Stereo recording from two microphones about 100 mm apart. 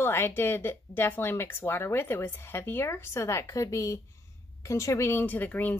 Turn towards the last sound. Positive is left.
turn(degrees=15)  # may be behind; listen again after turning